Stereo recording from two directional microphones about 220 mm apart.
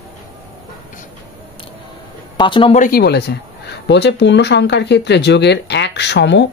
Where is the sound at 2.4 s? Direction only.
20° left (ahead or behind).